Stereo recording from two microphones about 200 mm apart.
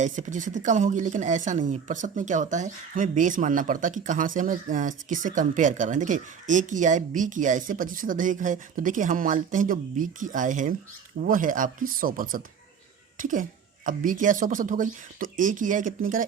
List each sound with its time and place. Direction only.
0.0 s speech: 40° right (ahead or behind)